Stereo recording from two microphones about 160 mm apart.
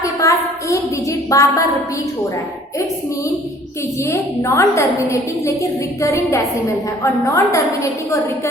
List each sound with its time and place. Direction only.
0.0 s a sound: 20° left (ahead or behind)
1.3 s a woman's voice: 20° left (ahead or behind)
4.0 s a woman's voice: 20° left (ahead or behind)